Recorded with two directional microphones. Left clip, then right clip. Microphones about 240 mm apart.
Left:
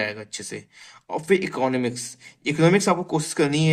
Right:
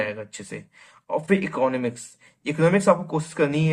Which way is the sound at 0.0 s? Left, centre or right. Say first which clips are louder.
Even; left.